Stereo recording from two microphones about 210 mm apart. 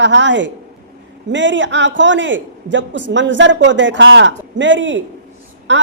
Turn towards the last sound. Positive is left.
turn(degrees=-60)  # may be behind; listen again after turning